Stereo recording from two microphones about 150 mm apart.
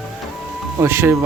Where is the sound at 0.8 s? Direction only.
15° right (ahead or behind).